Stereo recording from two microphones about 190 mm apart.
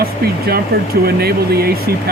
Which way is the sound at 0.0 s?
55° right (ahead or behind).